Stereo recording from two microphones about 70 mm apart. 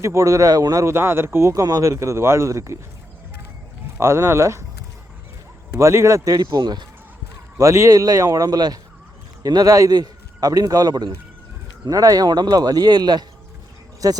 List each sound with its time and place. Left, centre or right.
0.0 s speech: right
0.9 s speech: right
4.0 s speech: right
5.7 s speech: right
6.3 s speech: right
7.6 s a man's voice: right
11.9 s speech: right
14.0 s a man's voice: right